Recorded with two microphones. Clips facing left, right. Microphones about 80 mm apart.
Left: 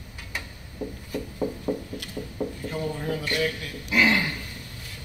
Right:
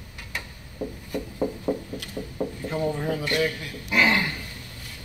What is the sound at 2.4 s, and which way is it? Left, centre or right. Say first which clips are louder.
Wood: right 1 dB; right.